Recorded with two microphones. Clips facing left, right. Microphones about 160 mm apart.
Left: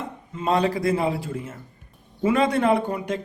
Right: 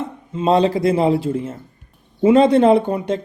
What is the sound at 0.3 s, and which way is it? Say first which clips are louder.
Speech: right 6 dB; 25° right (ahead or behind).